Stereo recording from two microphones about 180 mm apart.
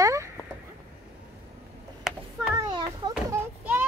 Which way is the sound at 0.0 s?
15° right (ahead or behind).